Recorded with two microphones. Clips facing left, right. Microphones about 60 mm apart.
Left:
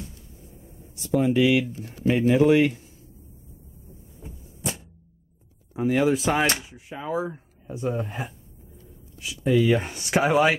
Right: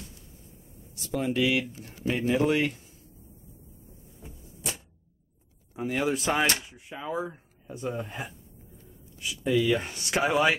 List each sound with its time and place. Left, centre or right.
1.1 s speech: centre
5.7 s speech: centre
9.3 s speech: centre
10.2 s speech: centre